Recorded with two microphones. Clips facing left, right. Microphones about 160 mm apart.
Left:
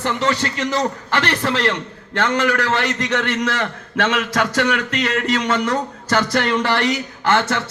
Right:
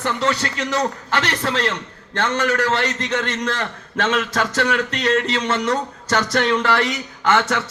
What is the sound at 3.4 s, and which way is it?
Speech, 65° left (ahead or behind).